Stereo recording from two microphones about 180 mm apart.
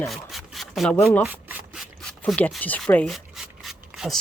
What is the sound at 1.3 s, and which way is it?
Rub, 10° right (ahead or behind).